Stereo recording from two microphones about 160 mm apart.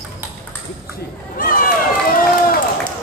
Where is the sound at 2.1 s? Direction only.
60° left (ahead or behind).